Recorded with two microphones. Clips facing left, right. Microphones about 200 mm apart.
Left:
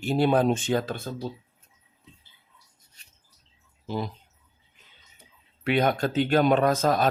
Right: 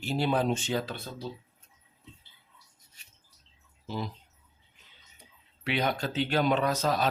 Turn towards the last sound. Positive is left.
turn(degrees=50)  # may be behind; listen again after turning